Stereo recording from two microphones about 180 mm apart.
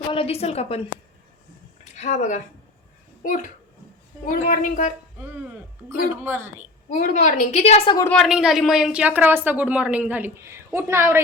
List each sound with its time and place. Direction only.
0.1 s a woman's voice: 30° left (ahead or behind)
4.3 s a woman's voice: 45° left (ahead or behind)
5.9 s speech: 15° right (ahead or behind)
6.9 s a woman's voice: 40° left (ahead or behind)
8.1 s speech: centre (ahead or behind)